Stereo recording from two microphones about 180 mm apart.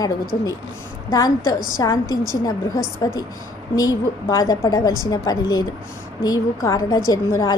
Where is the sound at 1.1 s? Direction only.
20° left (ahead or behind).